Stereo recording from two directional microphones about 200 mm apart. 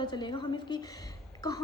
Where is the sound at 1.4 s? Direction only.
15° left (ahead or behind).